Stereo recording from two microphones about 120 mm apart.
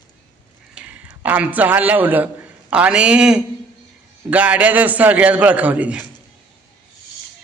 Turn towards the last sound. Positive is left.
turn(degrees=-10)  # may be behind; listen again after turning